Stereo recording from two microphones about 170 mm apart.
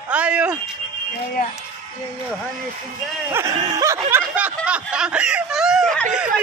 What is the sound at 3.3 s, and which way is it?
Snicker, 20° right (ahead or behind).